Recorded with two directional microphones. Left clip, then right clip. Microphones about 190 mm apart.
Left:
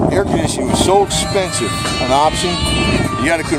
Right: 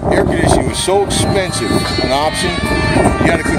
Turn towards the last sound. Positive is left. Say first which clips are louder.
# right 2 dB
turn(degrees=55)  # may be behind; listen again after turning